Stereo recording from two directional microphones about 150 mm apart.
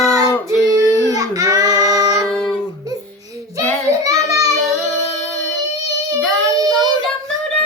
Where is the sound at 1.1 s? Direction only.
25° right (ahead or behind).